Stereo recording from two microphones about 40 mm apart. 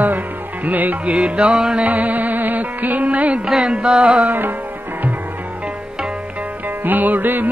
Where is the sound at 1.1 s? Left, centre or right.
Right.